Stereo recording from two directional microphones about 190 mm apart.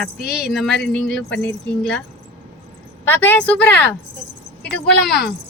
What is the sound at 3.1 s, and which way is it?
A woman's voice, 10° left (ahead or behind).